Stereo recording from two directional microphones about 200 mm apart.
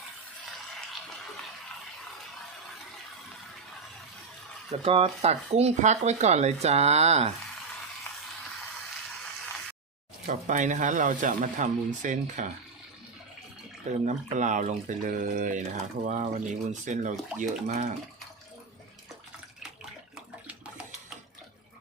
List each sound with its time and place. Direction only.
4.7 s speech: 30° right (ahead or behind)
10.2 s speech: 40° right (ahead or behind)
14.0 s speech: 40° right (ahead or behind)